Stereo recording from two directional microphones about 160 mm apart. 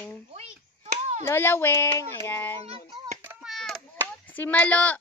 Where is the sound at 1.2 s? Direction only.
15° left (ahead or behind).